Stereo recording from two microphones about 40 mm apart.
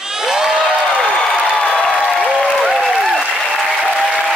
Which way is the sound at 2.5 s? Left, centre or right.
Centre.